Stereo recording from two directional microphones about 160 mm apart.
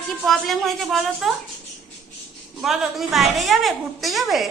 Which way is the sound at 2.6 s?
Centre (ahead or behind).